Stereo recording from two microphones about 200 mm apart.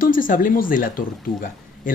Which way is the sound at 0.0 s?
40° left (ahead or behind).